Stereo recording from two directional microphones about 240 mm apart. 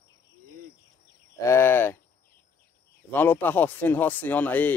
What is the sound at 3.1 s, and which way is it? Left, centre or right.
Speech, centre.